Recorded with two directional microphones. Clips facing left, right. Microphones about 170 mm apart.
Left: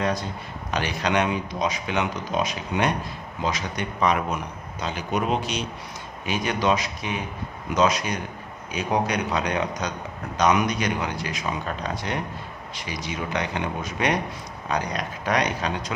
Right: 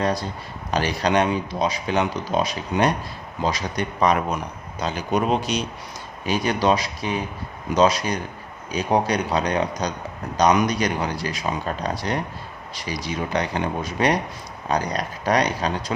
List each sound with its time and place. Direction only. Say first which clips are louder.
0.0 s speech: right 2 dB; 35° right (ahead or behind)